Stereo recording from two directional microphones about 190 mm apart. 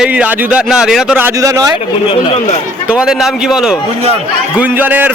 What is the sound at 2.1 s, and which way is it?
Speech, 30° left (ahead or behind).